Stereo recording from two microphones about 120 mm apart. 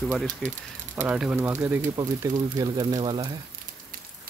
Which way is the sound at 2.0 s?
30° right (ahead or behind).